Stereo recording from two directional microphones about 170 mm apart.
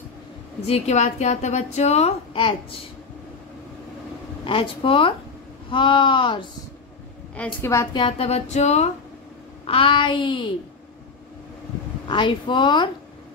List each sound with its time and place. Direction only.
0.7 s a woman's voice: 40° left (ahead or behind)
4.5 s a woman's voice: 30° left (ahead or behind)
7.3 s a woman's voice: 15° left (ahead or behind)
12.1 s speech: 30° left (ahead or behind)